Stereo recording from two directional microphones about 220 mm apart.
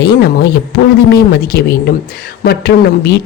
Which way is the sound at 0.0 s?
50° left (ahead or behind).